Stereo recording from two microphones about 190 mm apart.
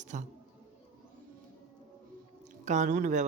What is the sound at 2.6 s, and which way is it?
Speech, 40° right (ahead or behind).